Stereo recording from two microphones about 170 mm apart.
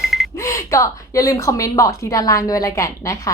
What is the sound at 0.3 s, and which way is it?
A woman's voice, 15° left (ahead or behind).